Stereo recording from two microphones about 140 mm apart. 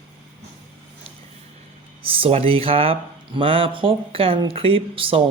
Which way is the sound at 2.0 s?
40° right (ahead or behind).